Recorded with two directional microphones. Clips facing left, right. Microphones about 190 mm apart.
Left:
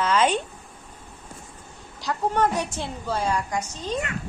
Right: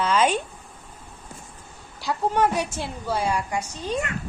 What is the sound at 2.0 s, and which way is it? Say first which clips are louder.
A woman's voice: right 1 dB; 10° right (ahead or behind).